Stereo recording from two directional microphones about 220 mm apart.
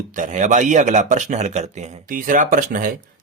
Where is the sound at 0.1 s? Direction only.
35° right (ahead or behind).